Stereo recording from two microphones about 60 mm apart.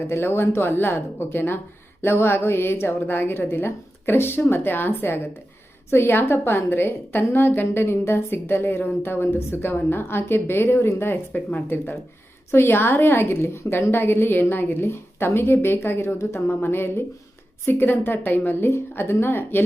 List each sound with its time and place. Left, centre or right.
0.1 s a woman's voice: left
12.5 s a woman's voice: left